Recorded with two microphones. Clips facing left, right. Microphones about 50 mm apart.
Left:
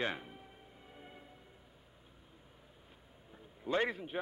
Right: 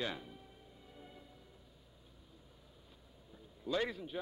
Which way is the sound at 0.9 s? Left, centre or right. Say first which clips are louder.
Left 1 dB; left.